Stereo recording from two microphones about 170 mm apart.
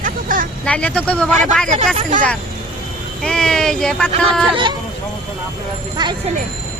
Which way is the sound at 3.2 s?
5° left (ahead or behind).